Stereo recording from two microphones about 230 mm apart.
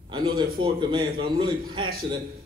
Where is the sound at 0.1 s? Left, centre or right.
Right.